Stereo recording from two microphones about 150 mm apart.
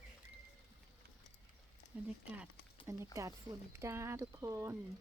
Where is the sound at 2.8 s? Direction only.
20° right (ahead or behind).